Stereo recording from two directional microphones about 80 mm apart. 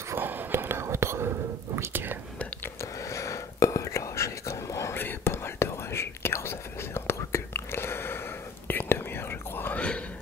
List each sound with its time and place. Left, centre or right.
0.1 s whispering: right
1.8 s speech: right
2.8 s whispering: left
9.8 s a sound: centre